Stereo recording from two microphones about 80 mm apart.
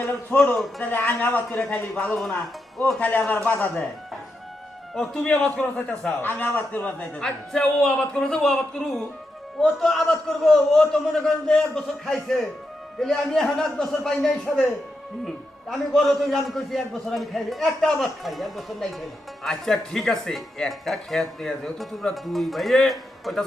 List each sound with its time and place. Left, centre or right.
0.0 s a man's voice: left
0.3 s a man's voice: centre
0.8 s a man's voice: left
2.1 s speech: centre
3.0 s a man's voice: left
4.9 s a man's voice: centre
15.7 s speech: centre